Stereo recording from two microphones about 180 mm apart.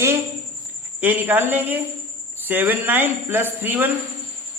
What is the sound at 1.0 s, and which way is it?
Speech, 10° right (ahead or behind).